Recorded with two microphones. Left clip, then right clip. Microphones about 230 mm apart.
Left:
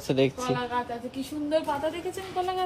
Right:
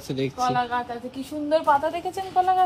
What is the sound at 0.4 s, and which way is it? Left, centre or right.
A woman's voice, centre.